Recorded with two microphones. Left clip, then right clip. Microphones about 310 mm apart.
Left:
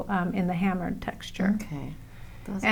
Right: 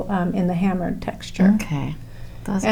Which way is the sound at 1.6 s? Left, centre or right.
Right.